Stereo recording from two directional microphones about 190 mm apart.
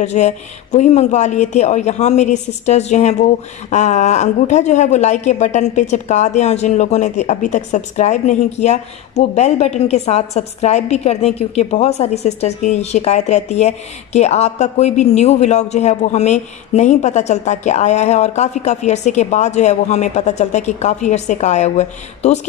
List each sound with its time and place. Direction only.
0.0 s a woman's voice: 35° left (ahead or behind)